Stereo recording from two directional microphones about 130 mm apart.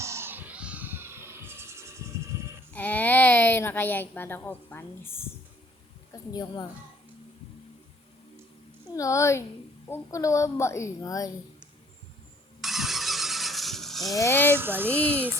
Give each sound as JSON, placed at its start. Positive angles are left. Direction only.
{"t": 0.0, "sound": "music", "side_deg": -20}
{"t": 2.7, "sound": "speech", "side_deg": 10}
{"t": 6.3, "sound": "a woman's voice", "side_deg": 30}
{"t": 9.0, "sound": "a woman's voice", "side_deg": 25}
{"t": 12.6, "sound": "vehicle", "side_deg": 0}
{"t": 14.1, "sound": "a woman's voice", "side_deg": 20}
{"t": 14.5, "sound": "speech", "side_deg": -15}
{"t": 14.8, "sound": "speech", "side_deg": 10}